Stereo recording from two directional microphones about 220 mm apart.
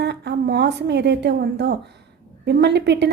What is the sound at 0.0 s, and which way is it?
A woman's voice, 50° right (ahead or behind).